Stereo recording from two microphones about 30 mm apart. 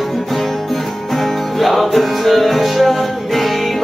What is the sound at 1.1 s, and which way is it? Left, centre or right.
Music, centre.